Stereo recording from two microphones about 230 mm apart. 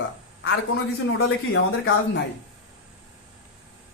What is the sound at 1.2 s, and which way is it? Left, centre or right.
Speech, left.